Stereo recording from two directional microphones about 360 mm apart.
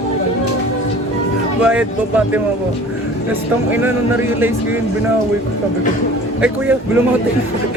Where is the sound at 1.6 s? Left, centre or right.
Centre.